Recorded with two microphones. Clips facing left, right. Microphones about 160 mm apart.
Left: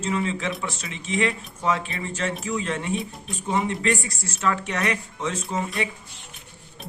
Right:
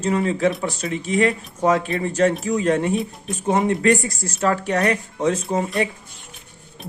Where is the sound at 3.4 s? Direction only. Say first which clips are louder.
Right 6 dB; 45° right (ahead or behind).